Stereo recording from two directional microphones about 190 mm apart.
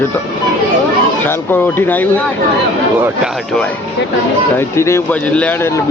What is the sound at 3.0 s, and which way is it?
Speech, 5° right (ahead or behind).